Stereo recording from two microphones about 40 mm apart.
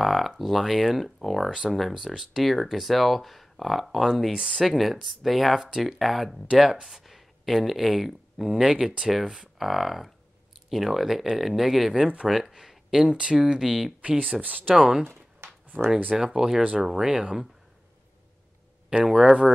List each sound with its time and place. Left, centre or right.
0.0 s speech: centre
4.3 s speech: right
4.6 s speech: centre
13.1 s speech: right
13.6 s speech: centre
14.0 s speech: right
14.8 s speech: centre
15.7 s speech: right
16.2 s speech: centre
19.0 s speech: centre